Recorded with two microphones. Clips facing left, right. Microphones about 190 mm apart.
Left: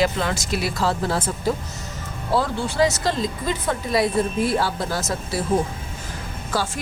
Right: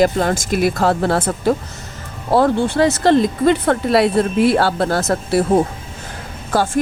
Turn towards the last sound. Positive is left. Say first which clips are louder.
# right 8 dB
turn(degrees=-50)  # may be behind; listen again after turning